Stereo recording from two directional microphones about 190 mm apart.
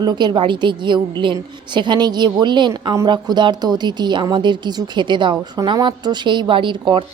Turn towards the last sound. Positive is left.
turn(degrees=-25)  # may be behind; listen again after turning